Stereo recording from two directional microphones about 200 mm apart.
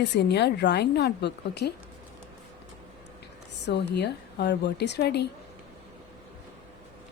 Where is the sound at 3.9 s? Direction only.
55° left (ahead or behind).